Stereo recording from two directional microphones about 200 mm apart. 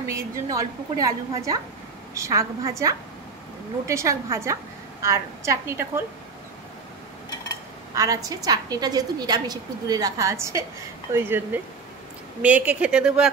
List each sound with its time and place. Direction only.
0.1 s a woman's voice: 15° right (ahead or behind)
7.9 s a woman's voice: 15° right (ahead or behind)